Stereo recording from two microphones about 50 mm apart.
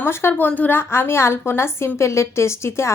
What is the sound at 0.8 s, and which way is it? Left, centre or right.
A woman's voice, left.